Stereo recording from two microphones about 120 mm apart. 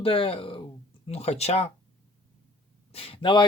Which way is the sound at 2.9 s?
55° left (ahead or behind).